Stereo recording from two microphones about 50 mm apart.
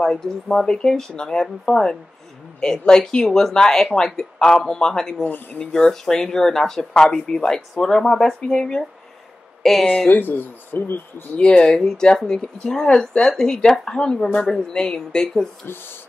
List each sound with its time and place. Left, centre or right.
0.0 s speech: centre
3.3 s speech: centre
5.2 s speech: left
5.7 s speech: centre
10.0 s speech: left
11.3 s speech: centre
15.6 s speech: left